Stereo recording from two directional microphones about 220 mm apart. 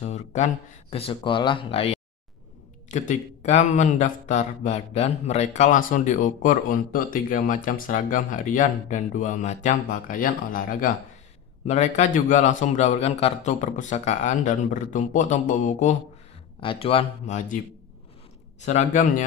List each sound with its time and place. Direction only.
0.0 s a man's voice: 30° left (ahead or behind)
18.6 s a man's voice: 30° left (ahead or behind)